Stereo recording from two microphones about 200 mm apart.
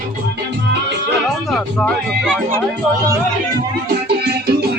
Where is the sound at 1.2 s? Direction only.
5° left (ahead or behind).